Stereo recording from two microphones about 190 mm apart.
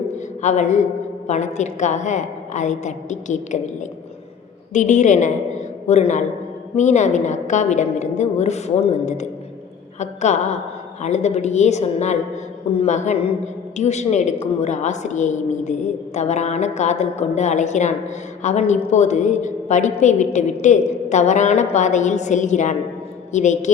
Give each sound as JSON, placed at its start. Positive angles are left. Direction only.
{"t": 0.1, "sound": "a sound", "side_deg": 40}
{"t": 1.3, "sound": "a woman's voice", "side_deg": 40}
{"t": 4.7, "sound": "a woman's voice", "side_deg": 40}